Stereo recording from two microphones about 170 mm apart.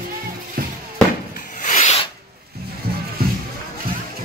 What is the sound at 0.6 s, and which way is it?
Music, 55° right (ahead or behind).